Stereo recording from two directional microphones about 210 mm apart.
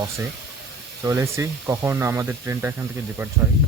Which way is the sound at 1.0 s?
15° right (ahead or behind).